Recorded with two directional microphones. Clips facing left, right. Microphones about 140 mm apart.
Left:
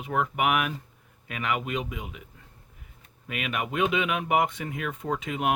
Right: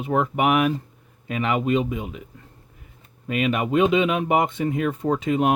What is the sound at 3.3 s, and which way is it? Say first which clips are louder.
Speech: right 9 dB; 30° right (ahead or behind).